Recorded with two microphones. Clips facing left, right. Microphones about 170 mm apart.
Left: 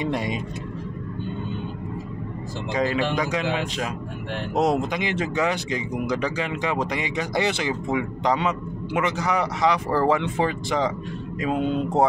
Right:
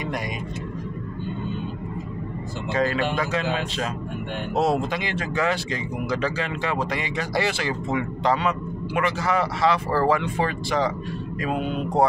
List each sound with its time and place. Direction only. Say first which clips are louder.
0.0 s speech: left 4 dB; 25° left (ahead or behind)
2.7 s speech: even; 15° left (ahead or behind)